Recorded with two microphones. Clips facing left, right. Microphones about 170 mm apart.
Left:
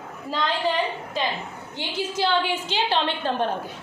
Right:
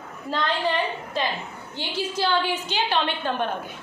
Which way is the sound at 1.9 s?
20° left (ahead or behind).